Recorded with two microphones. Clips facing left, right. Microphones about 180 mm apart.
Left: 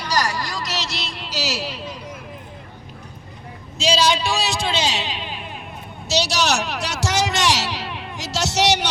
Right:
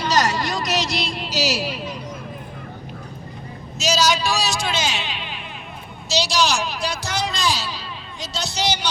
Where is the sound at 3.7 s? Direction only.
30° left (ahead or behind); by 5.6 s 45° left (ahead or behind).